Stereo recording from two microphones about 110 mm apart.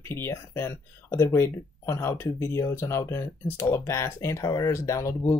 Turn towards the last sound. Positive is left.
turn(degrees=30)  # may be behind; listen again after turning